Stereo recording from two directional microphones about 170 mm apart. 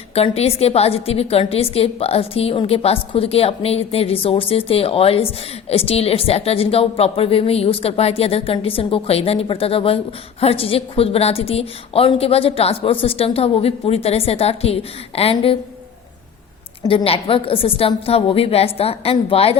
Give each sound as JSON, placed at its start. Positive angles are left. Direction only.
{"t": 0.1, "sound": "a woman's voice", "side_deg": 35}
{"t": 16.8, "sound": "a woman's voice", "side_deg": 30}